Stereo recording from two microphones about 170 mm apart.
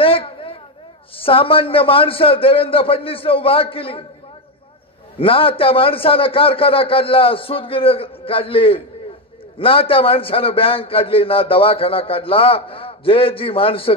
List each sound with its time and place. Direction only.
0.0 s a sound: 35° left (ahead or behind)
1.1 s a man's voice: 30° left (ahead or behind)
5.2 s a man's voice: 35° left (ahead or behind)